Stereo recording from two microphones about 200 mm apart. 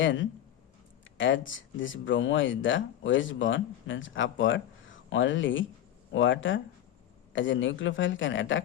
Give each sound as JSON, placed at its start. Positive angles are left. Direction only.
{"t": 0.0, "sound": "speech", "side_deg": 70}